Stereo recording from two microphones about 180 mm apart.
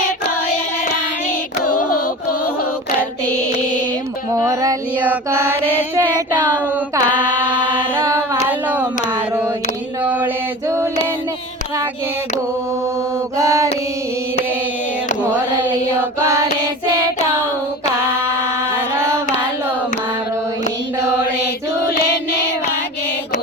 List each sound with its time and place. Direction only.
4.4 s female singing: 20° right (ahead or behind)
4.9 s mantra: 10° right (ahead or behind)
6.9 s mantra: 25° right (ahead or behind)
8.1 s a sound: 10° right (ahead or behind)
13.3 s mantra: 20° right (ahead or behind)
15.2 s a sound: 10° right (ahead or behind)
21.4 s chant: 60° left (ahead or behind)